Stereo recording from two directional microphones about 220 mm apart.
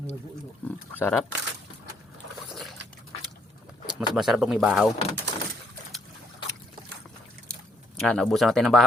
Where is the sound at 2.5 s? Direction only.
Centre (ahead or behind).